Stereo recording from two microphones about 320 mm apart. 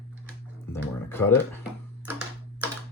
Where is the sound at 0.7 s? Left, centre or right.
Centre.